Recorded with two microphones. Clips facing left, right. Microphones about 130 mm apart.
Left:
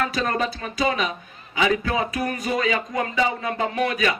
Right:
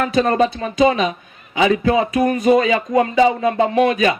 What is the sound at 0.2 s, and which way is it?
Speech, 30° right (ahead or behind).